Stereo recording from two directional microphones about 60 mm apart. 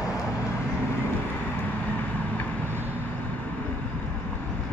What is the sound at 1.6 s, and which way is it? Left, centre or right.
Vehicle, left.